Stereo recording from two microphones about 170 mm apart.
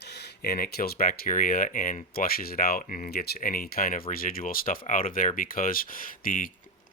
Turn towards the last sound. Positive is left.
turn(degrees=55)  # may be behind; listen again after turning